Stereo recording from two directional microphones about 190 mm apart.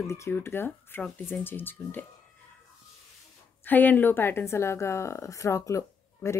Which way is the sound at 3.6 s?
10° left (ahead or behind).